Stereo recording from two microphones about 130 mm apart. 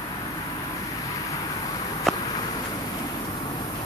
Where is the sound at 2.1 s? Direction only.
Centre (ahead or behind).